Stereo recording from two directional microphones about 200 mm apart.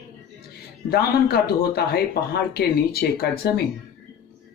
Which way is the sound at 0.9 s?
50° left (ahead or behind).